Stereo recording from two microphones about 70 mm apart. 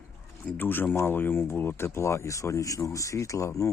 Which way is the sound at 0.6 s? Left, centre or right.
Left.